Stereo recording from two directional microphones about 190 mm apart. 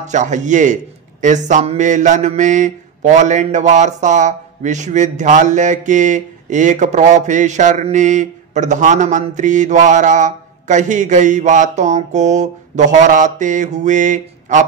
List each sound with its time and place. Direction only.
0.0 s mantra: 40° right (ahead or behind)